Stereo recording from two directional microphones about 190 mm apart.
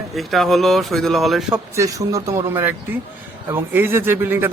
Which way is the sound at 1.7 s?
15° right (ahead or behind).